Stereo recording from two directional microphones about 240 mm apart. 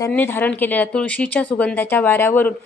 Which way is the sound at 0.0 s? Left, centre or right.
Centre.